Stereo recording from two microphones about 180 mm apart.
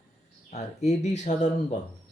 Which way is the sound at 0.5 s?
40° left (ahead or behind).